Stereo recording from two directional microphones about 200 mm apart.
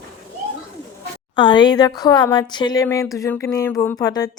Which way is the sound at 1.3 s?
25° left (ahead or behind).